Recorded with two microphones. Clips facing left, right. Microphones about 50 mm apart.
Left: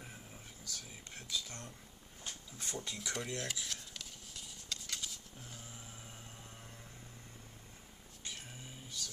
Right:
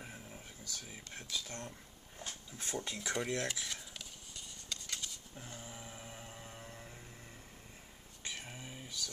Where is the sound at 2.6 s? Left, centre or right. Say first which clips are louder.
Right 3 dB; right.